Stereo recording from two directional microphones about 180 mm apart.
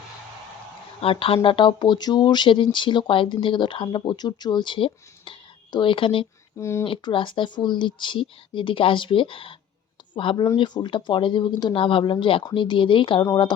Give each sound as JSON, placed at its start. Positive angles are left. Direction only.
{"t": 1.0, "sound": "speech", "side_deg": 30}
{"t": 6.6, "sound": "speech", "side_deg": 15}
{"t": 6.8, "sound": "speech", "side_deg": 30}